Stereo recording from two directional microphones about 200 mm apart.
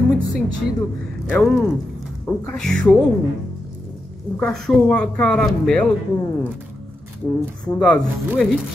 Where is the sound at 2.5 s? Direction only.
5° left (ahead or behind).